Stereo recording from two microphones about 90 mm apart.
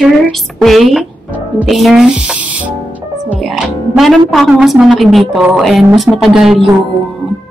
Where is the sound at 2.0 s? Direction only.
15° right (ahead or behind).